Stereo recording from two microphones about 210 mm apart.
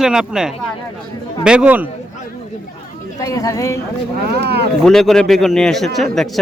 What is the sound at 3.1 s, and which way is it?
Speech, 15° left (ahead or behind).